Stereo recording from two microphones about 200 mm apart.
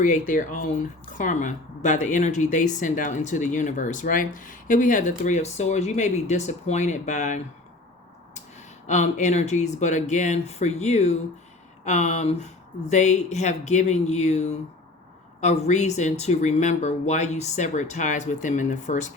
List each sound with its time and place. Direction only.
0.0 s speech: 40° left (ahead or behind)
8.9 s speech: 35° left (ahead or behind)